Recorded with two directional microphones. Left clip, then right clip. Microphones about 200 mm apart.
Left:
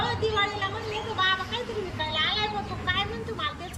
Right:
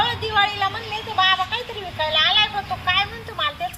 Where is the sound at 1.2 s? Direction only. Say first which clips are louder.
Right 8 dB; 5° left (ahead or behind).